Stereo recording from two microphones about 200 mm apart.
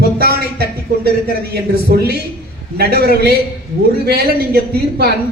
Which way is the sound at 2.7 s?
50° right (ahead or behind).